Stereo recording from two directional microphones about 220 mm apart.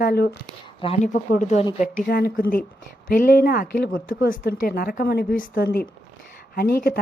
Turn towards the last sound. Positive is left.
turn(degrees=45)  # may be behind; listen again after turning